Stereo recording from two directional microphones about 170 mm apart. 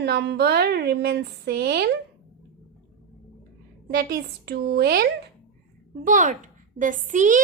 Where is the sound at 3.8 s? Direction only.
65° right (ahead or behind).